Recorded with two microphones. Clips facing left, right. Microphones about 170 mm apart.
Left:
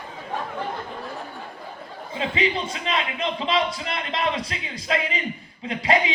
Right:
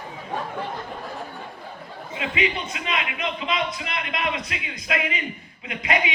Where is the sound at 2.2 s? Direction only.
30° left (ahead or behind).